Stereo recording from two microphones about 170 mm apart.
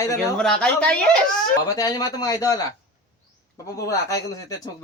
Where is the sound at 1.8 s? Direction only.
20° left (ahead or behind).